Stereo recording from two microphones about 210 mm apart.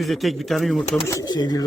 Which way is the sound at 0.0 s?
Centre (ahead or behind).